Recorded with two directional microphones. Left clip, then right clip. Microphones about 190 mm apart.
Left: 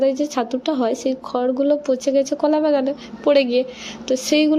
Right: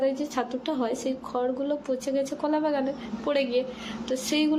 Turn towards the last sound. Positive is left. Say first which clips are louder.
# left 9 dB
turn(degrees=25)  # may be behind; listen again after turning